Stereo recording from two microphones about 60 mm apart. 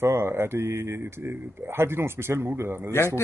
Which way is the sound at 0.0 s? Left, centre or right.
Right.